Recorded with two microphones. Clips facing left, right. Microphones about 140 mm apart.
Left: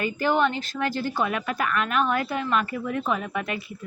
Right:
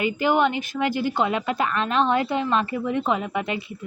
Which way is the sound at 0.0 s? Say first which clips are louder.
Right 2 dB; 15° right (ahead or behind).